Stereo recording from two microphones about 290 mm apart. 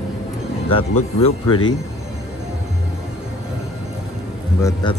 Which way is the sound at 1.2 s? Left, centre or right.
Centre.